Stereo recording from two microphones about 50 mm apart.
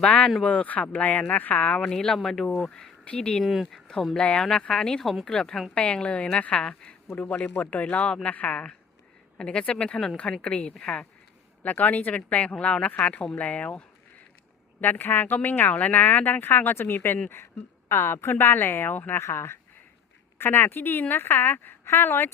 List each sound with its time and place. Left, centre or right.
0.4 s speech: left
1.8 s speech: centre
3.4 s speech: centre
4.2 s speech: centre
7.3 s speech: left
11.6 s speech: left
14.8 s speech: left
19.2 s speech: left